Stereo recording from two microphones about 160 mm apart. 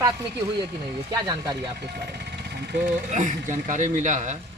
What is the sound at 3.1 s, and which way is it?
Speech, 50° right (ahead or behind).